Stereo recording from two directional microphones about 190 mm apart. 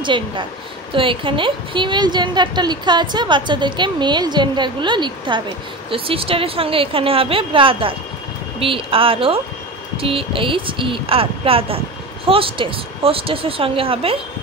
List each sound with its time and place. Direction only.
0.0 s a woman's voice: 25° right (ahead or behind)